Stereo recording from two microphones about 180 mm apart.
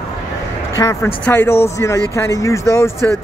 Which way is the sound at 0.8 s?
15° left (ahead or behind).